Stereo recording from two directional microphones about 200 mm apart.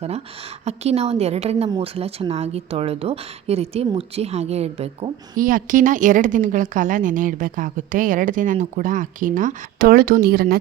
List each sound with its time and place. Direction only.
0.6 s a woman's voice: 30° right (ahead or behind)
5.4 s a woman's voice: 45° right (ahead or behind)